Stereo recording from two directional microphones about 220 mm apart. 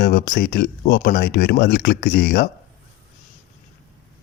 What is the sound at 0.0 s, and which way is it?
Speech, 40° left (ahead or behind).